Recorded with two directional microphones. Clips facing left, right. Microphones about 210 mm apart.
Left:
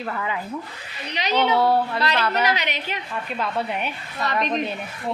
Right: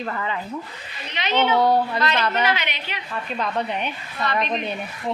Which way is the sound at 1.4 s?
5° left (ahead or behind).